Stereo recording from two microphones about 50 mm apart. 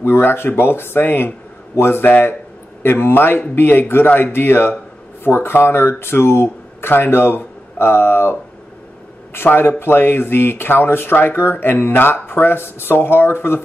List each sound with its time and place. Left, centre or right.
0.0 s speech: left
9.5 s speech: left